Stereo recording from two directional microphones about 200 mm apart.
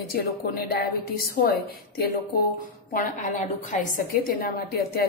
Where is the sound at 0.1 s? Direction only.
50° left (ahead or behind).